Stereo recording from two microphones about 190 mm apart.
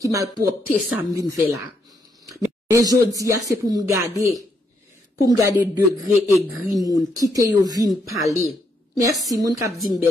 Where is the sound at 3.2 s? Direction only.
15° right (ahead or behind).